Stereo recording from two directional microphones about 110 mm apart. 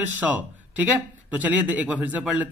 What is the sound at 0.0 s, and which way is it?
A man's voice, 15° right (ahead or behind).